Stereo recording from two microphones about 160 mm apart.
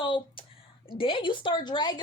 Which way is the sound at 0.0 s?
30° left (ahead or behind).